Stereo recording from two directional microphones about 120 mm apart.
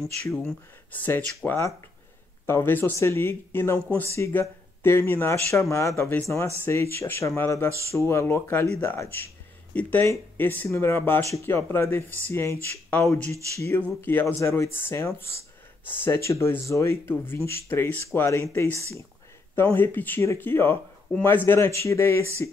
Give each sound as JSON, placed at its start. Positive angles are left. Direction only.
{"t": 0.3, "sound": "speech", "side_deg": 0}
{"t": 0.9, "sound": "speech", "side_deg": 15}